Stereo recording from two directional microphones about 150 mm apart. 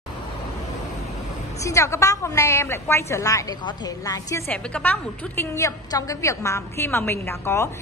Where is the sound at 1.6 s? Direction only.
20° left (ahead or behind).